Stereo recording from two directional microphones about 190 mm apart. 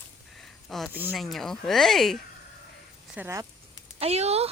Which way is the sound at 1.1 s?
Centre (ahead or behind).